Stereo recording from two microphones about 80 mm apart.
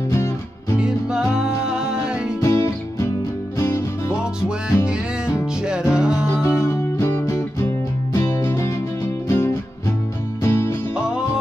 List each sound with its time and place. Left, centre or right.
0.7 s music: centre
2.4 s music: left
5.7 s music: centre
6.4 s music: left